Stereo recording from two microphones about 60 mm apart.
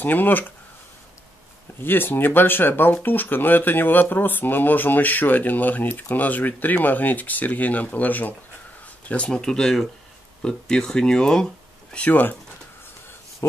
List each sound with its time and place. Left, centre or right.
0.0 s speech: left
1.8 s speech: left; by 11.4 s centre
12.0 s speech: left
13.4 s speech: left